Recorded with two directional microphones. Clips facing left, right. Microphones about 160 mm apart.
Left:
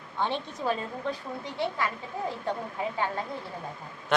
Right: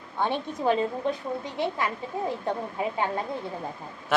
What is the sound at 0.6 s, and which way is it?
A woman's voice, 20° right (ahead or behind).